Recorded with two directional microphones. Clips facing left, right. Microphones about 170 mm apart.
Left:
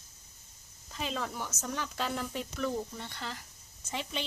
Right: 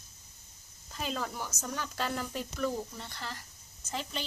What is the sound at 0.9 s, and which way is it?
A woman's voice, centre (ahead or behind).